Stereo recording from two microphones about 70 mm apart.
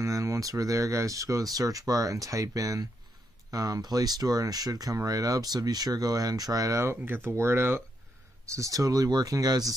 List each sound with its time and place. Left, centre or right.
0.0 s speech: right
7.0 s speech: right
8.5 s speech: right